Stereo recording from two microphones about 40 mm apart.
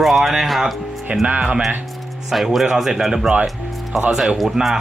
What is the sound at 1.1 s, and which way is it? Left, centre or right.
Speech, right.